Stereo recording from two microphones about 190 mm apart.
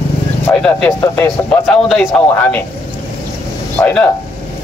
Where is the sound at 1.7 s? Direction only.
Centre (ahead or behind).